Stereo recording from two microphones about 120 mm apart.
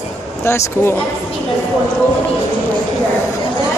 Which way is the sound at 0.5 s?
20° left (ahead or behind).